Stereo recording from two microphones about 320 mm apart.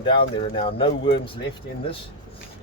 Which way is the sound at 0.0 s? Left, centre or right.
Centre.